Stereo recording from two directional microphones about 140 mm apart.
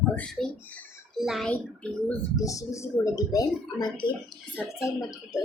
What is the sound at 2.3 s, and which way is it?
Speech, 25° left (ahead or behind).